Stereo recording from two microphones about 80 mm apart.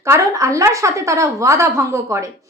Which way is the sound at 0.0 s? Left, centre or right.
Right.